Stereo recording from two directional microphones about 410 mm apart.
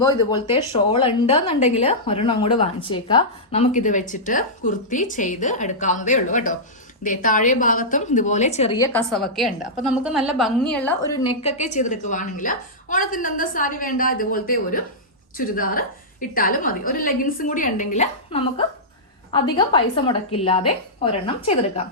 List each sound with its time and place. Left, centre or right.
0.0 s a woman's voice: centre